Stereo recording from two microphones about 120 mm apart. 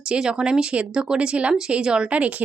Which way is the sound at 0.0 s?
5° right (ahead or behind).